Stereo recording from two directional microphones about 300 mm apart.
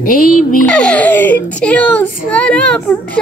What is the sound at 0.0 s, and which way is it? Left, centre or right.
Speech, left.